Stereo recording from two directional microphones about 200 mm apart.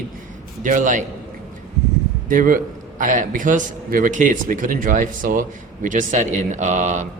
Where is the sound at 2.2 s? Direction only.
40° right (ahead or behind).